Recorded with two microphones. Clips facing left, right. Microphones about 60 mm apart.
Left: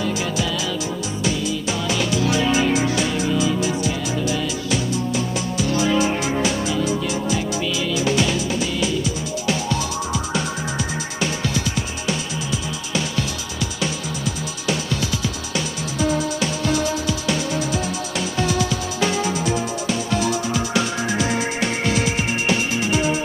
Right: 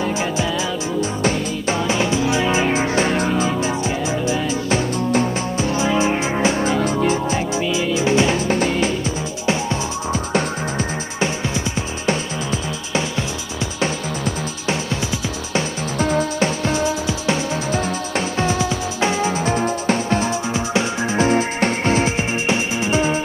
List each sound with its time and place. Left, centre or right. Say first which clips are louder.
1.2 s music: right 3 dB; right
6.7 s music: right 4 dB; right
11.2 s music: right 1 dB; right
17.6 s music: right 3 dB; right